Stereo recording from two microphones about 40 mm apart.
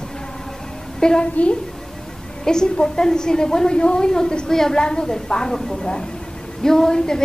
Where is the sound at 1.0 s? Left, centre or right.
Centre.